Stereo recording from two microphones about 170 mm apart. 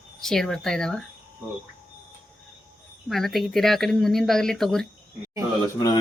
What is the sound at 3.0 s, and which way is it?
Speech, centre (ahead or behind).